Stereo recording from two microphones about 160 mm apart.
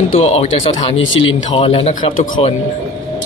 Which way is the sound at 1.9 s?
60° left (ahead or behind).